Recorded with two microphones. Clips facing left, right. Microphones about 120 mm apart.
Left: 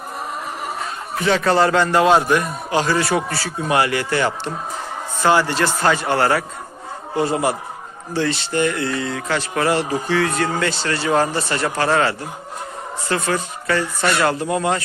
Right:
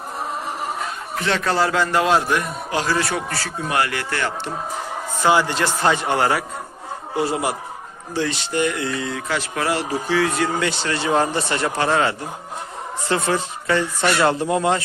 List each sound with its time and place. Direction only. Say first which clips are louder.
1.2 s a man's voice: left 4 dB; centre (ahead or behind)
3.7 s speech: left 4 dB; 20° left (ahead or behind)
5.2 s speech: left 1 dB; 15° right (ahead or behind)